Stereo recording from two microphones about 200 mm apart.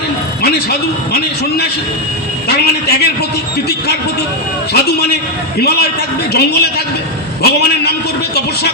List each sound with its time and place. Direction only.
0.4 s a man's voice: 50° left (ahead or behind)
4.7 s a man's voice: 55° left (ahead or behind)